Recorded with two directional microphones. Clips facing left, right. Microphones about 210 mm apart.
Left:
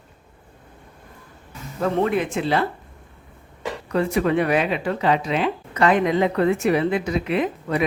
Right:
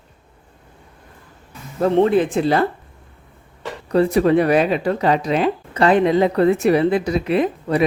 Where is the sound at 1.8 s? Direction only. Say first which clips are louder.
Right 6 dB; 30° right (ahead or behind).